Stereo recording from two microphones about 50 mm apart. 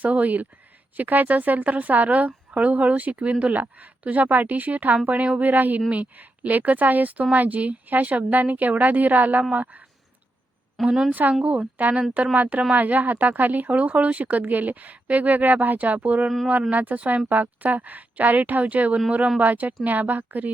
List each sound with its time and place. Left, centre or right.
0.0 s speech: right
10.8 s speech: centre
11.1 s speech: right